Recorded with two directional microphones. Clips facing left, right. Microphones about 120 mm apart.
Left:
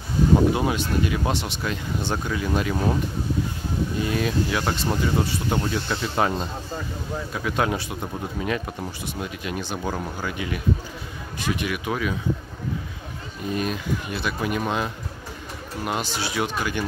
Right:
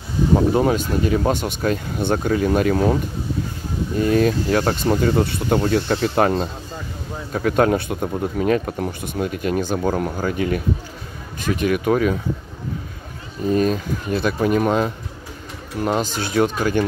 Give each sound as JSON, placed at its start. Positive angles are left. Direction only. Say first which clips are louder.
{"t": 0.6, "sound": "speech", "louder": "right 5 dB", "side_deg": -40}
{"t": 4.0, "sound": "speech", "louder": "right 9 dB", "side_deg": -45}
{"t": 7.3, "sound": "speech", "louder": "right 8 dB", "side_deg": -45}
{"t": 8.4, "sound": "speech", "louder": "right 8 dB", "side_deg": -65}
{"t": 8.7, "sound": "speech", "louder": "right 7 dB", "side_deg": -50}
{"t": 13.5, "sound": "speech", "louder": "right 7 dB", "side_deg": -40}